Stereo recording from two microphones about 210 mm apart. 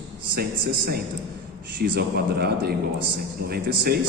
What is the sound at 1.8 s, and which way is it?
A man's voice, 50° right (ahead or behind).